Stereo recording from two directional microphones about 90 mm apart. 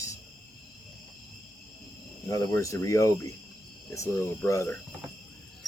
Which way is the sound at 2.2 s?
35° left (ahead or behind).